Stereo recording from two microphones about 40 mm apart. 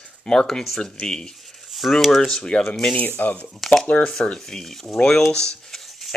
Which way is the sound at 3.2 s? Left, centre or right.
Left.